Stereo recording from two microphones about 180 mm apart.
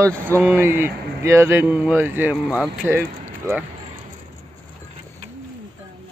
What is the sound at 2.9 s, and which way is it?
Speech, 15° right (ahead or behind).